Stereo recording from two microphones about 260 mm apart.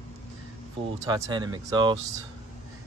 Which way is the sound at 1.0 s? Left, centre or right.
Centre.